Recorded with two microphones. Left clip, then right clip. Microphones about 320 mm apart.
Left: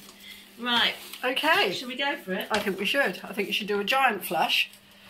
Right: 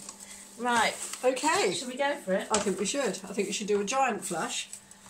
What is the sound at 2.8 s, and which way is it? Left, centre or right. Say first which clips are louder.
Speech: left 5 dB; centre.